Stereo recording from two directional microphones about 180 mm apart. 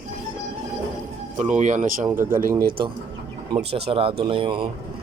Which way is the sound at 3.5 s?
35° right (ahead or behind).